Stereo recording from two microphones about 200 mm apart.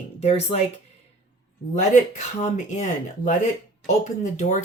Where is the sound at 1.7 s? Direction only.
35° left (ahead or behind).